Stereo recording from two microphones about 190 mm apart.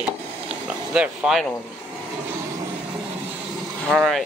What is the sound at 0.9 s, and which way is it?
Speech, 5° right (ahead or behind).